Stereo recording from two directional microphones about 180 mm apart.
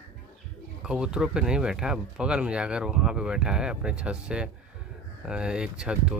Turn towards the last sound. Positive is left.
turn(degrees=-5)  # may be behind; listen again after turning